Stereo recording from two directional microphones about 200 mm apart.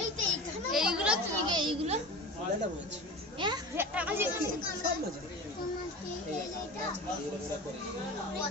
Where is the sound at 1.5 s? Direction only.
30° right (ahead or behind).